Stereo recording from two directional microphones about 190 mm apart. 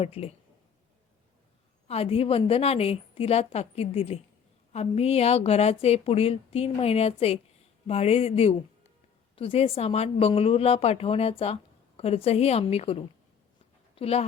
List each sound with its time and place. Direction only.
0.0 s speech: 30° left (ahead or behind)
1.9 s speech: 30° left (ahead or behind)